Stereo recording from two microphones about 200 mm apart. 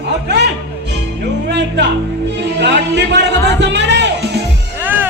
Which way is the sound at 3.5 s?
60° right (ahead or behind).